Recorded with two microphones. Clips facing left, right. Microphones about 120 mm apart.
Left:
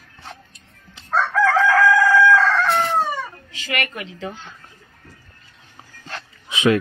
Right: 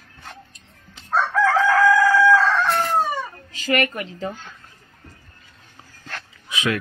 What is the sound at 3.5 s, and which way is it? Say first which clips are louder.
Speech: right 8 dB; 40° right (ahead or behind).